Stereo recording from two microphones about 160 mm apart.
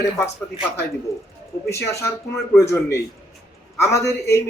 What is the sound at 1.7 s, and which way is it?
A man's voice, 15° left (ahead or behind).